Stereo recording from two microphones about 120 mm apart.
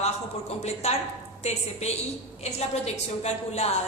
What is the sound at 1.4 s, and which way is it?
A woman's voice, 65° left (ahead or behind).